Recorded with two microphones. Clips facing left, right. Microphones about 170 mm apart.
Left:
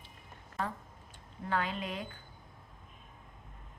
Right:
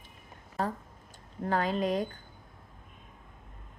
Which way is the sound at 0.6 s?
40° right (ahead or behind).